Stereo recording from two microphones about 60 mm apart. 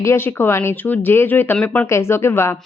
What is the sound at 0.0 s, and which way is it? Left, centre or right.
Speech, left.